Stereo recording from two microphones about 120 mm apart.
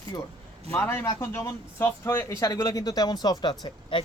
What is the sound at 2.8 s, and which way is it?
Speech, 35° left (ahead or behind).